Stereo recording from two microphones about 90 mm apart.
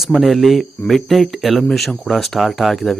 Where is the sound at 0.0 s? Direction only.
Centre (ahead or behind).